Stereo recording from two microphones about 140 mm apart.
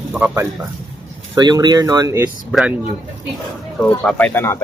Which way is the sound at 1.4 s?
30° right (ahead or behind).